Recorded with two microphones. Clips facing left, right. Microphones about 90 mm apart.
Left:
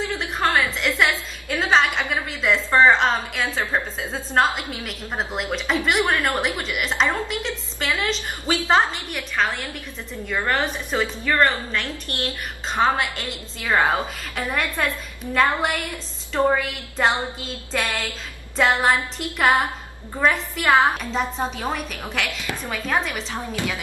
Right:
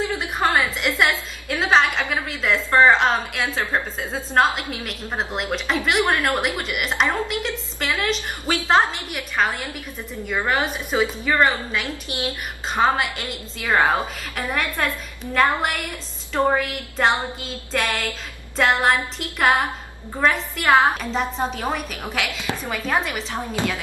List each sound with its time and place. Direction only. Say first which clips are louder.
0.4 s a sound: right 1 dB; 10° right (ahead or behind)
0.7 s a woman's voice: even; 5° right (ahead or behind)
16.4 s a woman's voice: left 1 dB; centre (ahead or behind)
23.3 s a woman's voice: right 4 dB; 15° right (ahead or behind)